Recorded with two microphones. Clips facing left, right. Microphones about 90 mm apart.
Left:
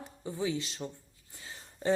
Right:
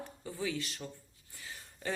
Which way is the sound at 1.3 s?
25° left (ahead or behind).